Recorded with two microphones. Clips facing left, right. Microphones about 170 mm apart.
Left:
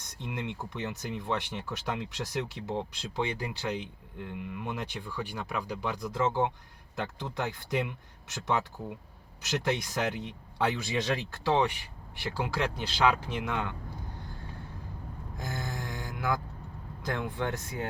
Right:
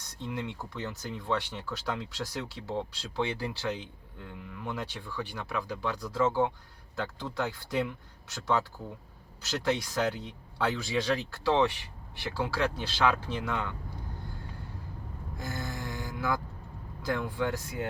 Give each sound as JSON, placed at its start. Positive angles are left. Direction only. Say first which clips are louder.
{"t": 0.3, "sound": "speech", "louder": "even", "side_deg": 20}
{"t": 15.4, "sound": "a sound", "louder": "even", "side_deg": 20}
{"t": 17.0, "sound": "speech", "louder": "right 2 dB", "side_deg": 20}